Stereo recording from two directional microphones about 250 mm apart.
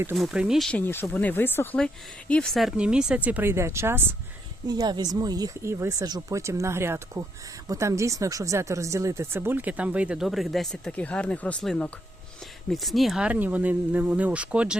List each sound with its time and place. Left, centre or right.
0.0 s speech: centre